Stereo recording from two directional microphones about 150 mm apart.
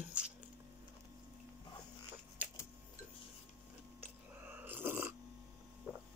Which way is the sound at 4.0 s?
10° right (ahead or behind).